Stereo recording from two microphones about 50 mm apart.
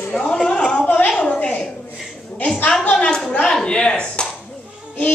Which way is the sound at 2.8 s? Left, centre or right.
Left.